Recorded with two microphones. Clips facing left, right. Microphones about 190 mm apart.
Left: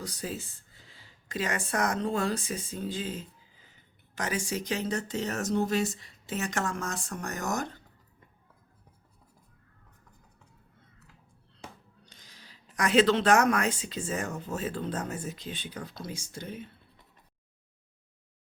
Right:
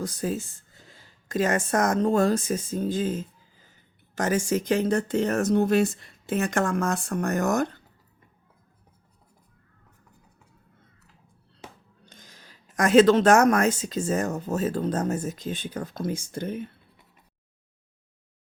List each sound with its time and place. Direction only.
0.0 s speech: 50° right (ahead or behind)
12.0 s speech: 50° right (ahead or behind)